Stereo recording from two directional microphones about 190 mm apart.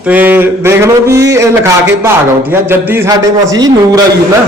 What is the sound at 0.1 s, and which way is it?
Speech, 10° right (ahead or behind).